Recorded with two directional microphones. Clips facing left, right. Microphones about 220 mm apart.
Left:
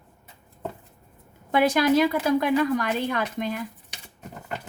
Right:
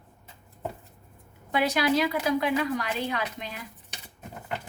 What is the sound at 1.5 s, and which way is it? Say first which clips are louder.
A woman's voice: left 5 dB; 50° left (ahead or behind).